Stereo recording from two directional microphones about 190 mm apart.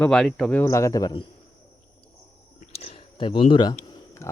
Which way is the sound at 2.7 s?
30° left (ahead or behind).